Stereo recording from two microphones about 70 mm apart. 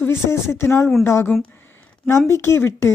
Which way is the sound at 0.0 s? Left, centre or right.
Left.